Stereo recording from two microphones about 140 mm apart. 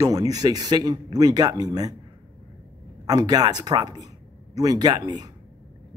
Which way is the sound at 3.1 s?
25° right (ahead or behind).